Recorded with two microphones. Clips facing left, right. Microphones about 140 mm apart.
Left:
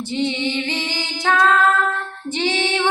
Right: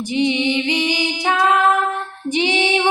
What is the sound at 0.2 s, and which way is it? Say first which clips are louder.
Female singing: right 4 dB; 15° right (ahead or behind).